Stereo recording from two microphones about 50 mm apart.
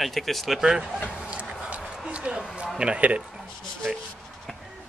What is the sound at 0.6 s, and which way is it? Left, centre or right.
Speech, centre.